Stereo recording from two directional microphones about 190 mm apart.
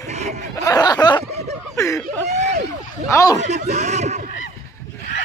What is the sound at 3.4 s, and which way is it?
Speech, 35° right (ahead or behind).